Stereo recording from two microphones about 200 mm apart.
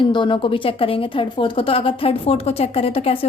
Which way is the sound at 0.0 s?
25° left (ahead or behind).